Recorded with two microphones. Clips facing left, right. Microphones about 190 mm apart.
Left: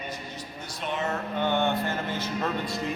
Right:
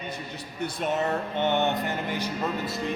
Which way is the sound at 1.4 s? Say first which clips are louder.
Even; 20° right (ahead or behind).